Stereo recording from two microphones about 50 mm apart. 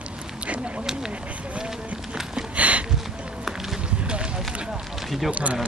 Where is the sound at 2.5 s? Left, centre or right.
Right.